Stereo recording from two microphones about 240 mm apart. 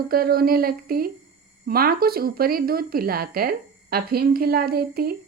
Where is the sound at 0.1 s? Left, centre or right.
Right.